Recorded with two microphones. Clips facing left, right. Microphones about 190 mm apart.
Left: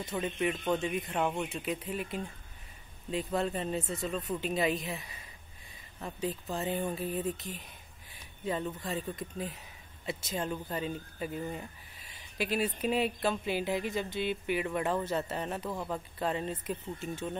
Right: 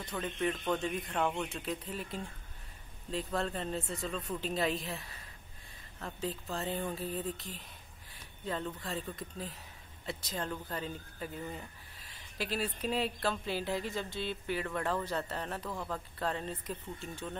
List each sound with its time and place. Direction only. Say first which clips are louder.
0.1 s speech: left 2 dB; 15° left (ahead or behind)